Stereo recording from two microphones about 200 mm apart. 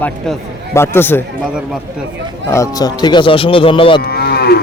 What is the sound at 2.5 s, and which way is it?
Speech, 15° left (ahead or behind).